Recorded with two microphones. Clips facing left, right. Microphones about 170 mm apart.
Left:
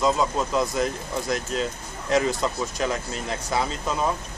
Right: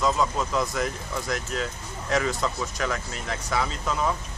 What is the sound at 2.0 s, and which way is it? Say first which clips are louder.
Speech: left 3 dB; 25° left (ahead or behind).